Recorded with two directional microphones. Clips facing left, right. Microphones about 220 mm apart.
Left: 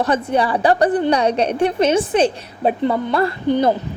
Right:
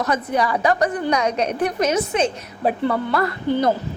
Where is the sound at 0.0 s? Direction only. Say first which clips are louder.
Left 3 dB; 30° left (ahead or behind).